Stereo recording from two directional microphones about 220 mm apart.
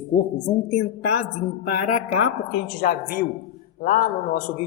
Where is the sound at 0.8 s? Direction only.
75° left (ahead or behind).